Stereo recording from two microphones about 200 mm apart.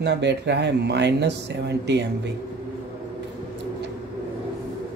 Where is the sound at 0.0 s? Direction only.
60° right (ahead or behind).